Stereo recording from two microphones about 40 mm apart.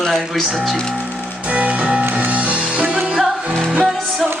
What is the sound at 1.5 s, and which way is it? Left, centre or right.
Music, right.